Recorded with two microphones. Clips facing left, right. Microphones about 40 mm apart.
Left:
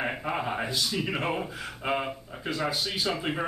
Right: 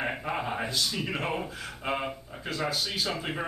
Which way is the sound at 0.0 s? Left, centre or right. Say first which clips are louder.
Left 1 dB; centre.